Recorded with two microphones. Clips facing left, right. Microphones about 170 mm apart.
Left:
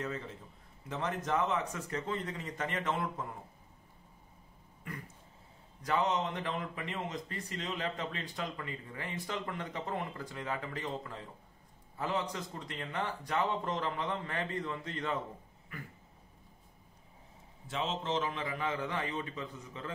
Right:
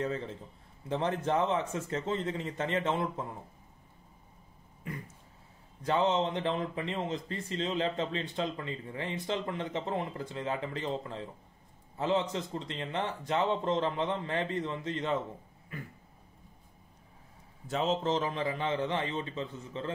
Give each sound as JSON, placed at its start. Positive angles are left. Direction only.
{"t": 0.0, "sound": "a man's voice", "side_deg": -30}
{"t": 5.8, "sound": "speech", "side_deg": -25}
{"t": 17.6, "sound": "speech", "side_deg": -40}